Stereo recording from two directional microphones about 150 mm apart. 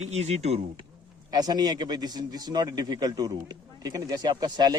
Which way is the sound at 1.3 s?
25° right (ahead or behind).